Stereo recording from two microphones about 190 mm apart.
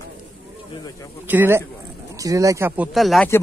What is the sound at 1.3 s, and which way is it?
Speech, 10° right (ahead or behind).